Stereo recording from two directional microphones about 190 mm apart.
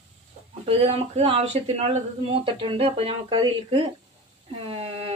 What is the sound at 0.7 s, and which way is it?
Speech, 35° right (ahead or behind).